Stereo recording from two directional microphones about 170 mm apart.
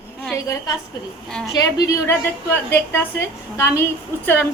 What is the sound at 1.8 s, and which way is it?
A woman's voice, 15° left (ahead or behind).